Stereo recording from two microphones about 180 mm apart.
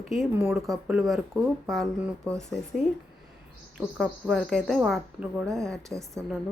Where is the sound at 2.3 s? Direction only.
5° left (ahead or behind).